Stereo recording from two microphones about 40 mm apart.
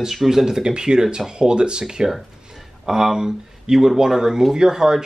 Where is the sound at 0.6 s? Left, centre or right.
Centre.